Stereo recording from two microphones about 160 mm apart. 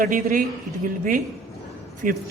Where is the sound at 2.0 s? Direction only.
55° right (ahead or behind).